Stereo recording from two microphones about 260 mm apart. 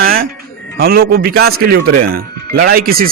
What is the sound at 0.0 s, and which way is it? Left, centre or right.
Music, right.